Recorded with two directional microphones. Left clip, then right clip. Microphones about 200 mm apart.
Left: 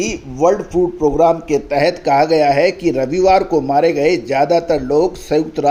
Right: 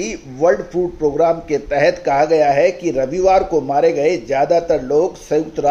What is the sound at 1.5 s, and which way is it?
Speech, 35° left (ahead or behind).